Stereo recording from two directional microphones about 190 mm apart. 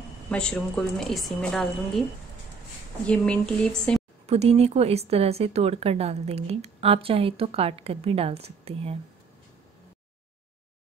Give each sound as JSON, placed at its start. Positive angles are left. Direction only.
{"t": 0.3, "sound": "a woman's voice", "side_deg": 5}
{"t": 3.1, "sound": "a woman's voice", "side_deg": 5}
{"t": 4.3, "sound": "speech", "side_deg": -35}